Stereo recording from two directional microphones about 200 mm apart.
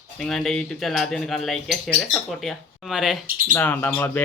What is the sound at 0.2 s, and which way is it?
Speech, centre (ahead or behind).